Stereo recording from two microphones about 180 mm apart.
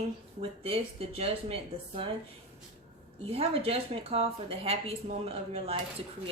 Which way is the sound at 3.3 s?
30° right (ahead or behind).